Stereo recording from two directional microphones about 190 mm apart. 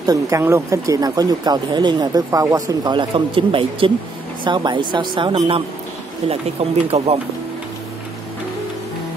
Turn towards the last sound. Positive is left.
turn(degrees=-35)  # may be behind; listen again after turning